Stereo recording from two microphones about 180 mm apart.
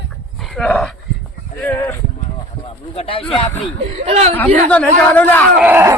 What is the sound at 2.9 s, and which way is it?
Speech, 30° left (ahead or behind).